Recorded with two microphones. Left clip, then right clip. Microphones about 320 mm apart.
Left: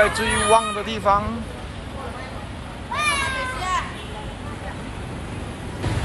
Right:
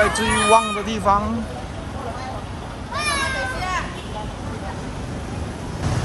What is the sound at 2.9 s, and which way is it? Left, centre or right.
Cat, centre.